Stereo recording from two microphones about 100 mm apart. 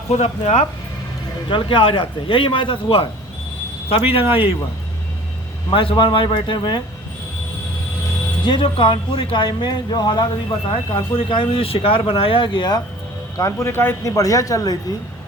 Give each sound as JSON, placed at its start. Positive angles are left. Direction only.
{"t": 0.1, "sound": "speech", "side_deg": 90}
{"t": 1.5, "sound": "speech", "side_deg": 55}
{"t": 5.7, "sound": "speech", "side_deg": 60}
{"t": 8.4, "sound": "speech", "side_deg": 55}
{"t": 13.3, "sound": "speech", "side_deg": 30}